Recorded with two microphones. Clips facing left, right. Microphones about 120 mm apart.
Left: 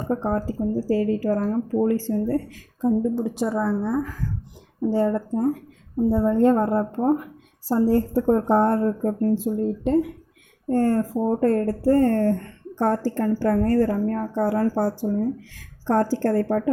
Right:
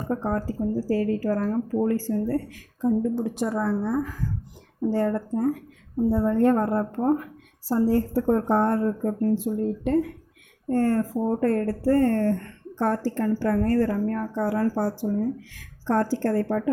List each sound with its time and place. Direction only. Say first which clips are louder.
0.1 s speech: left 2 dB; 25° left (ahead or behind)
3.4 s a woman's voice: left 2 dB; 5° left (ahead or behind)
4.9 s speech: left 2 dB; 15° left (ahead or behind)
6.1 s speech: left 2 dB; 15° left (ahead or behind)
7.7 s speech: left 2 dB; 35° left (ahead or behind)
8.1 s speech: left 3 dB; 20° left (ahead or behind); by 16.6 s 40° left (ahead or behind)